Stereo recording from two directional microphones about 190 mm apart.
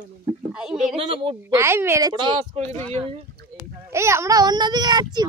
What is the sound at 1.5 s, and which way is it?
A woman's voice, 15° right (ahead or behind).